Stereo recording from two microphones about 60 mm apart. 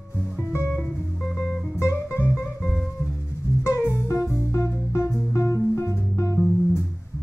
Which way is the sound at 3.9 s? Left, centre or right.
Left.